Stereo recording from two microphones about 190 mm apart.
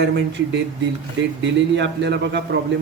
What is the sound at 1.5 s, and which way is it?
A man's voice, 70° right (ahead or behind).